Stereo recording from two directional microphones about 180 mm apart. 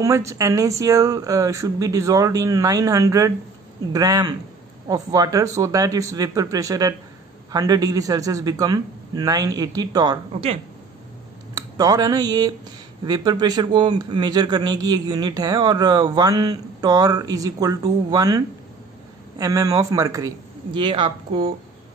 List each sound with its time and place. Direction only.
0.0 s a man's voice: 15° right (ahead or behind)
11.7 s a man's voice: 20° right (ahead or behind)